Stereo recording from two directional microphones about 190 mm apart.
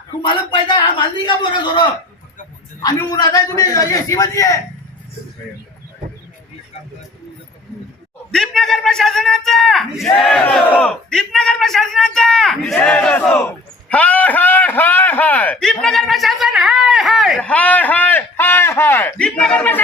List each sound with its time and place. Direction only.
0.2 s a man's voice: 25° left (ahead or behind)
8.3 s a man's voice: centre (ahead or behind)